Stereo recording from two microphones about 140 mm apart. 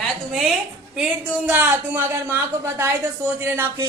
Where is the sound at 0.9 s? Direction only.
5° right (ahead or behind).